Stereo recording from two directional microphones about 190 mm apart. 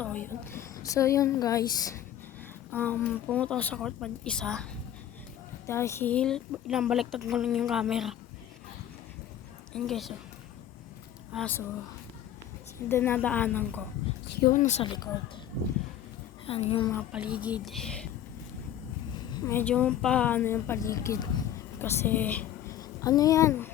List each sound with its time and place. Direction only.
0.0 s a woman's voice: 10° left (ahead or behind)
5.6 s speech: 15° left (ahead or behind); by 8.1 s 5° right (ahead or behind)
9.7 s speech: centre (ahead or behind)
11.3 s speech: 10° left (ahead or behind)
12.9 s speech: 10° left (ahead or behind)
14.4 s speech: 40° left (ahead or behind); by 15.1 s 25° left (ahead or behind)
16.5 s speech: 30° left (ahead or behind)
17.1 s speech: 5° right (ahead or behind)
19.3 s a woman's voice: 10° left (ahead or behind)